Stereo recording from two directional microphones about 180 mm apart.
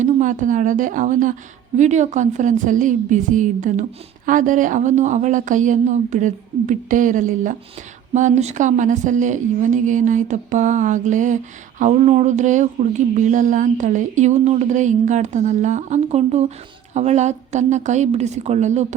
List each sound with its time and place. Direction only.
0.0 s a woman's voice: 45° right (ahead or behind)